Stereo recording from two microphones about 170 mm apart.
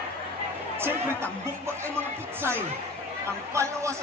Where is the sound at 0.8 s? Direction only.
15° right (ahead or behind).